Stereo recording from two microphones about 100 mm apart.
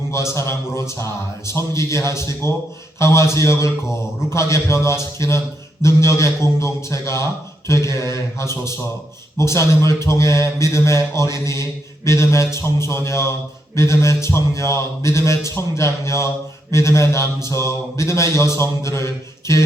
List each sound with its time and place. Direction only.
0.1 s mantra: 25° left (ahead or behind)